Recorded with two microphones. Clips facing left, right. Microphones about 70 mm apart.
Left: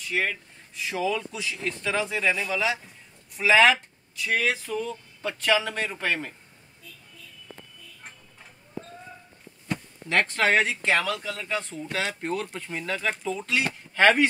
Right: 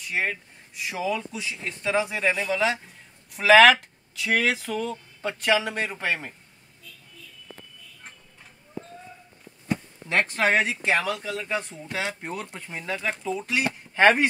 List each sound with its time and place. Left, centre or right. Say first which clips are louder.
0.1 s speech: even; right
0.8 s speech: left 1 dB; centre
2.0 s speech: right 4 dB; right
2.5 s speech: right 2 dB; right
3.3 s speech: right 4 dB; right
5.4 s speech: right 1 dB; right
9.7 s speech: right 2 dB; right